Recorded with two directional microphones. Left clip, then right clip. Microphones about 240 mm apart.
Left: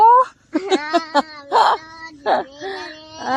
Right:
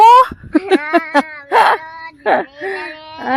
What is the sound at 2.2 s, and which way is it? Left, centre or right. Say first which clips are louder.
Speech: right 4 dB; right.